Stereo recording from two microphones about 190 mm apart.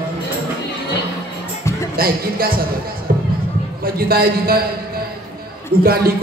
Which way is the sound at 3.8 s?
50° right (ahead or behind).